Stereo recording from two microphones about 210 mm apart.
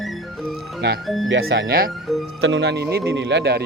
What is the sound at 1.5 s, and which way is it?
Speech, 50° right (ahead or behind).